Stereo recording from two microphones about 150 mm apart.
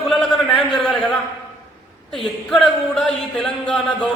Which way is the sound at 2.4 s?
5° left (ahead or behind).